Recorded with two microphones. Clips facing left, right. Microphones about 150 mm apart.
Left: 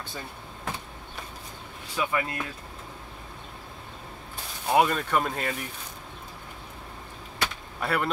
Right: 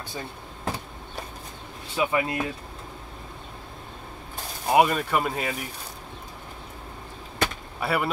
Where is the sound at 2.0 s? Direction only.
20° right (ahead or behind).